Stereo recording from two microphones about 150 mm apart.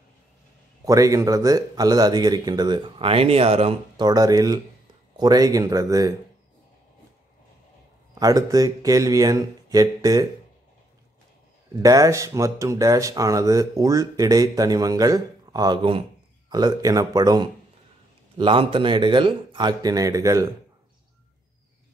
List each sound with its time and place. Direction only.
0.8 s speech: 25° right (ahead or behind); by 4.0 s 40° right (ahead or behind)
4.0 s speech: 25° right (ahead or behind)
8.1 s speech: 25° right (ahead or behind)
11.7 s speech: 25° right (ahead or behind)